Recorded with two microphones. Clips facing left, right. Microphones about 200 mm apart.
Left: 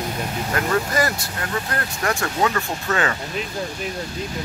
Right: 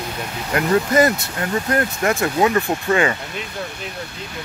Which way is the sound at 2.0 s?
20° right (ahead or behind).